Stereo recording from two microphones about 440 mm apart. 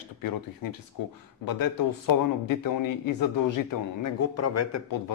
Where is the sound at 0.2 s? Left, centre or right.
Left.